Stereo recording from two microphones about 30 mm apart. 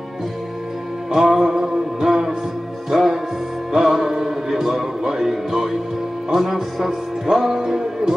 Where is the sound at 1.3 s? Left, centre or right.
Right.